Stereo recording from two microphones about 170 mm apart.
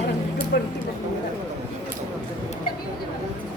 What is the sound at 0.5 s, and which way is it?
Speech, 65° left (ahead or behind).